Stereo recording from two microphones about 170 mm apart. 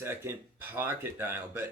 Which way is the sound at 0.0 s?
15° right (ahead or behind).